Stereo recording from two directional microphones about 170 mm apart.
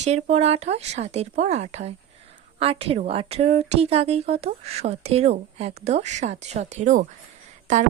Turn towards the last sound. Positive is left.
turn(degrees=-45)  # may be behind; listen again after turning